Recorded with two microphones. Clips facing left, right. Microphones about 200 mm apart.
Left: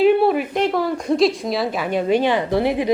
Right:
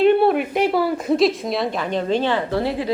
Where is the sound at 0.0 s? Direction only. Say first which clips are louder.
Even; centre (ahead or behind).